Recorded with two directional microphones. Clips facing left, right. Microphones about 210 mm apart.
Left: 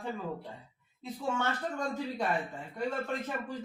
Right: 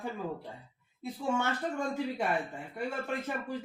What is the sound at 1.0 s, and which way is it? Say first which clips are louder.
Speech: right 1 dB; 10° right (ahead or behind).